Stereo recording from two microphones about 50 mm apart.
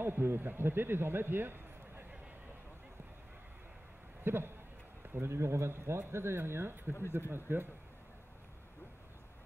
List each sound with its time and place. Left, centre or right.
0.0 s a man's voice: right
4.2 s speech: right